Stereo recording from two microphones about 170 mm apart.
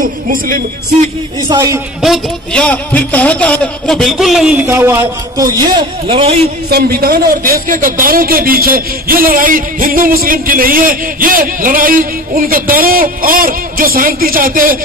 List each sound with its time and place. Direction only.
0.0 s speech: 55° right (ahead or behind)
1.5 s a man's voice: 20° right (ahead or behind)
2.0 s a man's voice: centre (ahead or behind); by 6.4 s 35° right (ahead or behind)
6.7 s speech: 60° right (ahead or behind)